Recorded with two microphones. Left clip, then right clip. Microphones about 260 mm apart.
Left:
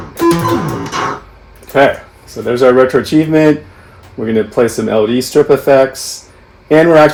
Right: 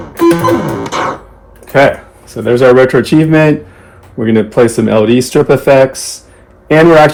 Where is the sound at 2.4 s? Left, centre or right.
Right.